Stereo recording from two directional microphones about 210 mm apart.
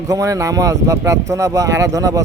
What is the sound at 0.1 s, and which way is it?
Speech, 15° right (ahead or behind).